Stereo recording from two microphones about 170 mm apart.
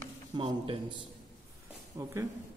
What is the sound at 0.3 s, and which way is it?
Speech, 30° right (ahead or behind).